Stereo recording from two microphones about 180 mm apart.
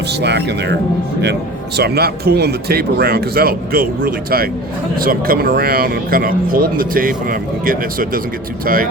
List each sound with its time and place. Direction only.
0.1 s a man's voice: 70° right (ahead or behind); by 8.9 s 50° right (ahead or behind)